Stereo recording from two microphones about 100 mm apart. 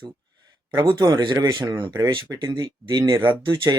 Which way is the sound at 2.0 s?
40° right (ahead or behind).